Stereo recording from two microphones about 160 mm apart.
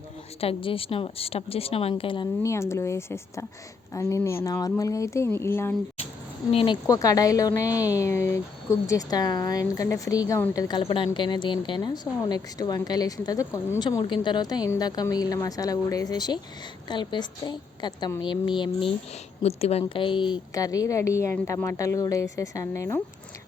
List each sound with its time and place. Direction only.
0.3 s a woman's voice: 35° left (ahead or behind)
2.4 s speech: 15° left (ahead or behind)
6.5 s a woman's voice: 35° left (ahead or behind)
6.8 s a woman's voice: 20° left (ahead or behind)